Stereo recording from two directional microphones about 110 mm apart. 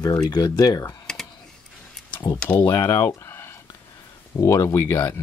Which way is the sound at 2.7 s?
35° left (ahead or behind).